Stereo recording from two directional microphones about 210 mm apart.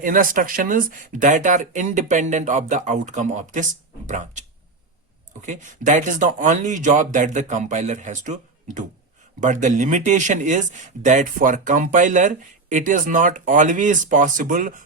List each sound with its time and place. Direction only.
0.0 s speech: 40° right (ahead or behind)
5.5 s speech: 35° right (ahead or behind)